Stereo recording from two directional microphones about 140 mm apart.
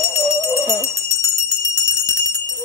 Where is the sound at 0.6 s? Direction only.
25° right (ahead or behind).